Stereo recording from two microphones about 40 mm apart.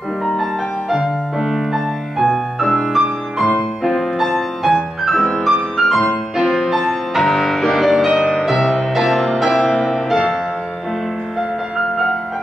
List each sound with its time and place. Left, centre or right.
0.3 s music: centre